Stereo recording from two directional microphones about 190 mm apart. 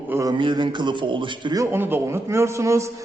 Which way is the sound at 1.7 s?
10° right (ahead or behind).